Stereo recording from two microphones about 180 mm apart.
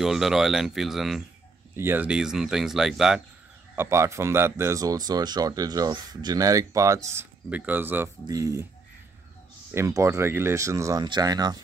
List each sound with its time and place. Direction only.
0.0 s speech: centre (ahead or behind)
3.7 s speech: 15° right (ahead or behind)
9.7 s speech: 15° right (ahead or behind)